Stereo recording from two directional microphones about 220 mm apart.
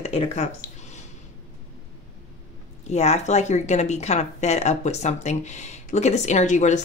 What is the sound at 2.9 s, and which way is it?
Speech, 30° left (ahead or behind).